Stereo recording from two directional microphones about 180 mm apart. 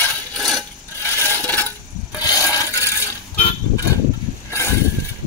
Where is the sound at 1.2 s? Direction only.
10° left (ahead or behind).